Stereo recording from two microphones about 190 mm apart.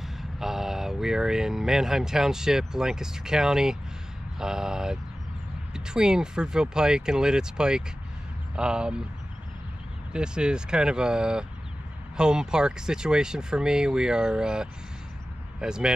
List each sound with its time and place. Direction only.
0.0 s speech: centre (ahead or behind)
10.1 s speech: 5° right (ahead or behind)